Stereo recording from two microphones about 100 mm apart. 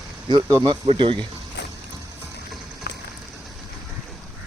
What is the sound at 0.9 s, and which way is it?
Speech, 55° right (ahead or behind).